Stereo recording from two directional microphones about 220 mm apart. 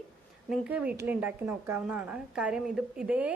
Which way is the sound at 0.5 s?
5° right (ahead or behind).